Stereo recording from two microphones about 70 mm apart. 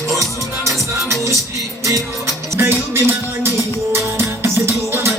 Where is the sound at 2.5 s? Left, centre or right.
Right.